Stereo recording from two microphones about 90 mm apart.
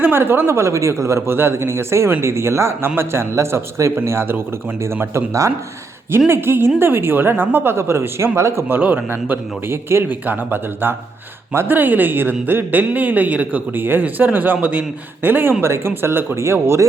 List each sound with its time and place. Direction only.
0.0 s speech: 25° right (ahead or behind)